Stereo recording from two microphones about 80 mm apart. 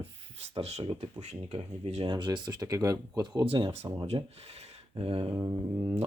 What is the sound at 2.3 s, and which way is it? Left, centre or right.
Speech, right.